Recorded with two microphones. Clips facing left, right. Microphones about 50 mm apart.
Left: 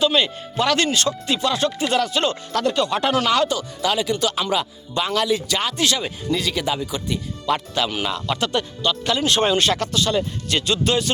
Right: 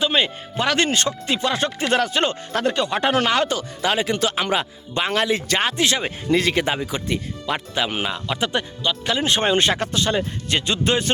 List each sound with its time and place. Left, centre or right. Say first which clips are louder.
0.0 s speech: left 1 dB; right
7.4 s speech: left 4 dB; centre